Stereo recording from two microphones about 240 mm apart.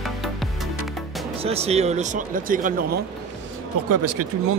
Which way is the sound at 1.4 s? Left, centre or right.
Right.